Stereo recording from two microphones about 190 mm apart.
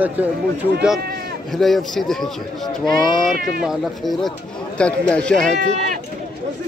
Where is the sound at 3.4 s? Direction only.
50° right (ahead or behind).